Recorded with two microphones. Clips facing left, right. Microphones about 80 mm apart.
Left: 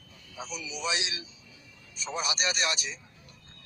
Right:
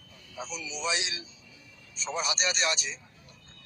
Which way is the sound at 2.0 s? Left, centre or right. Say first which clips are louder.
Right 1 dB; centre.